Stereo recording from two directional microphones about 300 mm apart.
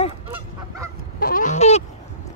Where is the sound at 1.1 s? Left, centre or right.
Left.